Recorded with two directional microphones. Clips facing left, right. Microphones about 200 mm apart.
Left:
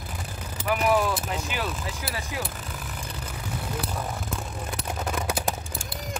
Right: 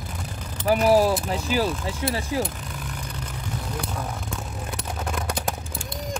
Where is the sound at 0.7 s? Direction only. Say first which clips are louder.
Right 5 dB; 35° right (ahead or behind).